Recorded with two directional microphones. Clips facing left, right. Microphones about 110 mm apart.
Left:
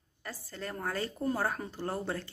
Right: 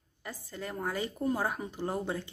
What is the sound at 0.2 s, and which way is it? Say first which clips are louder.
Speech: right 1 dB; 15° right (ahead or behind).